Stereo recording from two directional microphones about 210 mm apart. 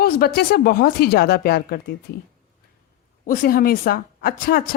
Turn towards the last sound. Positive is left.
turn(degrees=45)  # may be behind; listen again after turning